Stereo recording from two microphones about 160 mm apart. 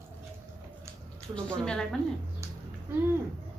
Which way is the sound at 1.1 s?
5° left (ahead or behind).